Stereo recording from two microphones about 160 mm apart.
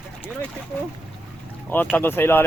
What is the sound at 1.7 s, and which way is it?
Speech, 10° left (ahead or behind).